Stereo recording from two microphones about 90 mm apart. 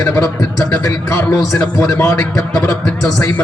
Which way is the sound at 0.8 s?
40° left (ahead or behind).